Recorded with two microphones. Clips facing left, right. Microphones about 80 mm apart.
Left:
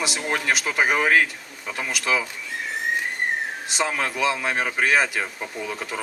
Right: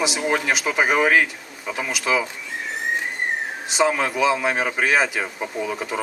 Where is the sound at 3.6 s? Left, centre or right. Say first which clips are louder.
Right 7 dB; centre.